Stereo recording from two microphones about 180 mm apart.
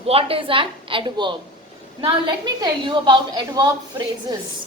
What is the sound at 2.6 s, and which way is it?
A woman's voice, 25° right (ahead or behind).